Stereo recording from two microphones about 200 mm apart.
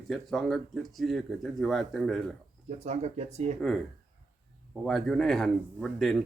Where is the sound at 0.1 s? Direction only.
Centre (ahead or behind).